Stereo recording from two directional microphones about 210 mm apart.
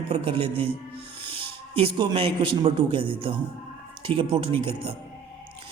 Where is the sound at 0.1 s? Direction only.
25° right (ahead or behind).